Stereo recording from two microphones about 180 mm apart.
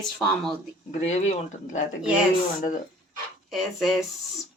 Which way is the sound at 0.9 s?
40° left (ahead or behind).